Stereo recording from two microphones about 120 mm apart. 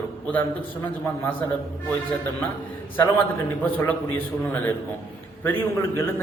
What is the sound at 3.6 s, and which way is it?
A man's voice, 15° left (ahead or behind).